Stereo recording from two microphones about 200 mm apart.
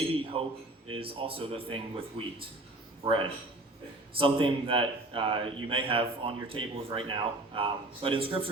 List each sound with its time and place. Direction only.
0.4 s a man's voice: 25° right (ahead or behind)